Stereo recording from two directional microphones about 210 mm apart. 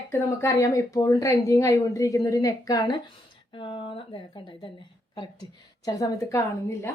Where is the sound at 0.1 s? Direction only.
15° left (ahead or behind).